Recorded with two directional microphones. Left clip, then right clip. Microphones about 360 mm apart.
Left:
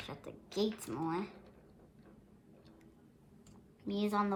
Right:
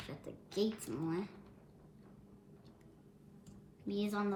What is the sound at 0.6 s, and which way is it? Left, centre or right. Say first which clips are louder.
Speech: left 1 dB; centre.